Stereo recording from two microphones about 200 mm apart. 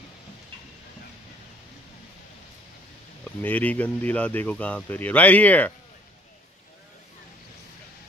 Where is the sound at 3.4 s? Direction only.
10° left (ahead or behind).